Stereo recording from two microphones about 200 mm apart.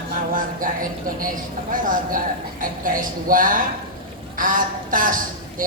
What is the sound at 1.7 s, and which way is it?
Speech, 45° right (ahead or behind).